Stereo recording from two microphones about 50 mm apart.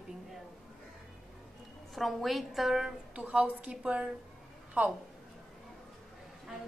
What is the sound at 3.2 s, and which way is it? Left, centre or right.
Speech, right.